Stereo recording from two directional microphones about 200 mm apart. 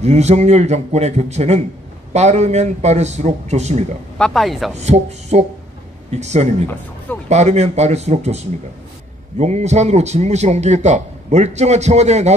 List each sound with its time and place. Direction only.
0.0 s a man's voice: 35° right (ahead or behind)
4.2 s speech: centre (ahead or behind)
4.7 s a man's voice: 35° right (ahead or behind)